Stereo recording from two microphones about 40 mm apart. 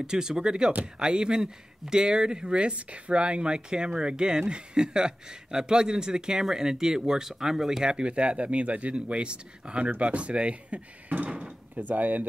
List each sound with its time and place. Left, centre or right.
0.0 s speech: centre
7.8 s speech: right
11.2 s drawer open or close: right
11.9 s speech: right